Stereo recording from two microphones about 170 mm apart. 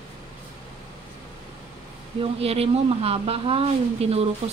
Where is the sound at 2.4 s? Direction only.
35° right (ahead or behind).